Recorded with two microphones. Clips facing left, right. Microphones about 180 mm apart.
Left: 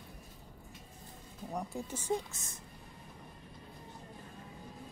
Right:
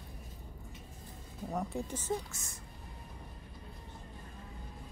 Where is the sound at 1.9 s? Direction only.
10° left (ahead or behind).